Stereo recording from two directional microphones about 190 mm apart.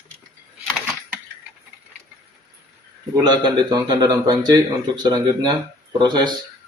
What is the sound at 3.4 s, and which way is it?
Speech, 25° right (ahead or behind).